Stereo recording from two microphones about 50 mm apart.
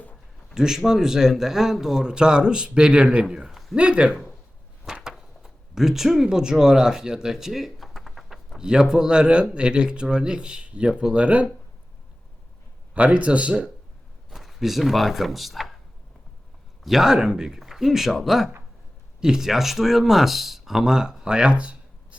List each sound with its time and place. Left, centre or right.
0.5 s a man's voice: centre
3.2 s speech: centre
3.8 s speech: right
4.9 s a sound: centre
8.5 s speech: centre
12.9 s speech: right
14.3 s speech: centre
16.8 s speech: centre; by 22.2 s right